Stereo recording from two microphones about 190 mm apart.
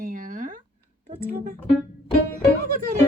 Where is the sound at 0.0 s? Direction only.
45° right (ahead or behind).